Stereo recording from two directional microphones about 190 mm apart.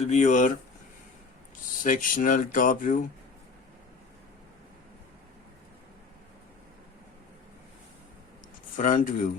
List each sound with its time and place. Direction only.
0.0 s speech: 35° left (ahead or behind)
1.8 s speech: 45° left (ahead or behind)
8.7 s speech: 45° left (ahead or behind)